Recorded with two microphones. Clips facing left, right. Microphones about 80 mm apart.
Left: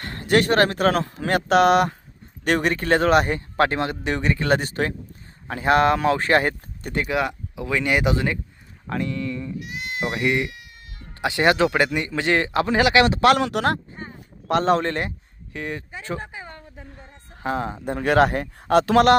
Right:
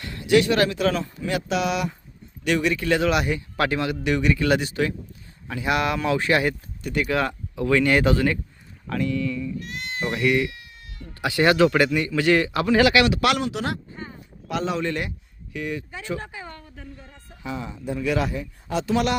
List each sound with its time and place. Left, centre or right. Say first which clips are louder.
0.0 s speech: right 1 dB; left
7.1 s speech: even; centre; by 9.6 s left
9.6 s bleat: left 1 dB; centre
10.1 s a man's voice: right 2 dB; left
13.4 s speech: left 5 dB; left
14.4 s speech: left 6 dB; left
16.2 s a sound: even; left
17.3 s speech: left 6 dB; left